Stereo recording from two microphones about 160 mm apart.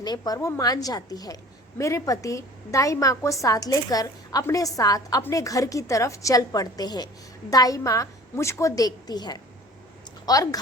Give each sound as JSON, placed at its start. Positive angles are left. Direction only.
{"t": 0.0, "sound": "a woman's voice", "side_deg": 25}